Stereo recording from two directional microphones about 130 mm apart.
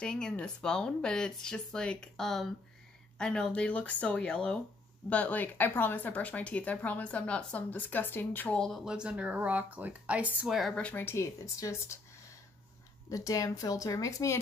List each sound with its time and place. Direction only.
0.0 s speech: 5° left (ahead or behind); by 12.0 s 25° left (ahead or behind)
13.1 s speech: 25° left (ahead or behind)